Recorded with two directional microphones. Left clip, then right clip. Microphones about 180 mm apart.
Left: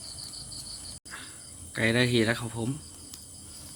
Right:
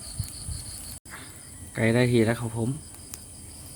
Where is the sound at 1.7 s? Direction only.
10° right (ahead or behind).